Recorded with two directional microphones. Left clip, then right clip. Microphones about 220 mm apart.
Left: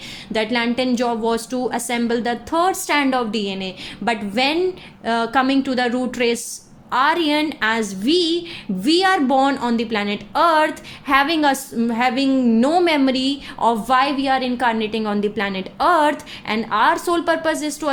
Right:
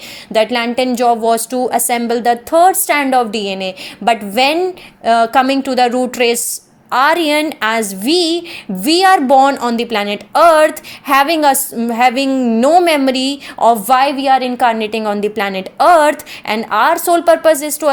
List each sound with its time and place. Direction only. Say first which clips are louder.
0.3 s a woman's voice: right 7 dB; 30° right (ahead or behind)